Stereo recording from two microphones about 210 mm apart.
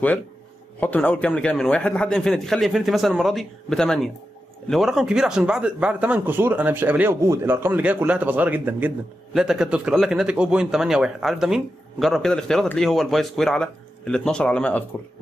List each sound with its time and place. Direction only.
0.7 s speech: 10° left (ahead or behind)